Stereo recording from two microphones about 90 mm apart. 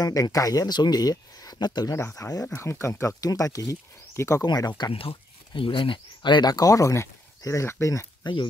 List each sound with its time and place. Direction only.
0.0 s speech: 40° left (ahead or behind)
2.0 s speech: 35° left (ahead or behind)
4.5 s speech: 50° left (ahead or behind)
4.9 s speech: 85° left; by 8.1 s 30° left (ahead or behind)
8.2 s speech: 60° left (ahead or behind)